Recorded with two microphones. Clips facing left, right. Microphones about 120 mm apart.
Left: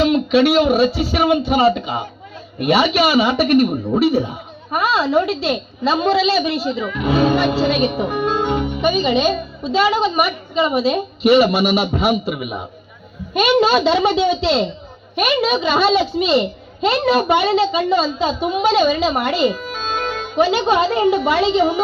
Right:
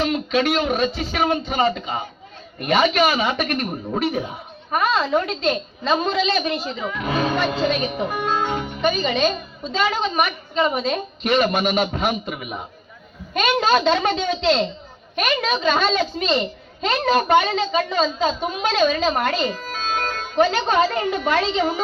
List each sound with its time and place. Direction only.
0.1 s a child's voice: 5° left (ahead or behind)
8.5 s music: 20° left (ahead or behind)
8.8 s a child's voice: 5° left (ahead or behind)